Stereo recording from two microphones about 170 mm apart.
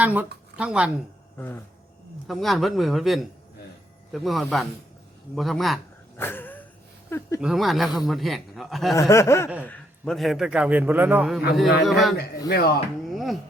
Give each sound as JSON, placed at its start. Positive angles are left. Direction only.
{"t": 0.0, "sound": "speech", "side_deg": -10}
{"t": 1.4, "sound": "snicker", "side_deg": 10}
{"t": 2.2, "sound": "a man's voice", "side_deg": 0}
{"t": 6.1, "sound": "a sound", "side_deg": 10}
{"t": 7.4, "sound": "a man's voice", "side_deg": 0}
{"t": 9.0, "sound": "snicker", "side_deg": 15}
{"t": 9.6, "sound": "a man's voice", "side_deg": 5}
{"t": 12.5, "sound": "speech", "side_deg": 70}
{"t": 13.1, "sound": "a sound", "side_deg": 0}